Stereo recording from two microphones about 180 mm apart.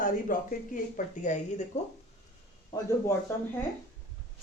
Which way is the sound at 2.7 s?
15° left (ahead or behind).